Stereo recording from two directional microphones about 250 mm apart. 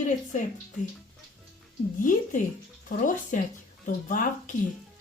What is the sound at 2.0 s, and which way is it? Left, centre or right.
Speech, left.